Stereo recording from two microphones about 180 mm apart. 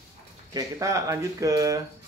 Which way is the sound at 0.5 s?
20° right (ahead or behind).